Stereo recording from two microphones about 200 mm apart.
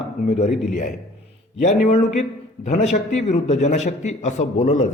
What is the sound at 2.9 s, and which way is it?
A man's voice, 35° left (ahead or behind).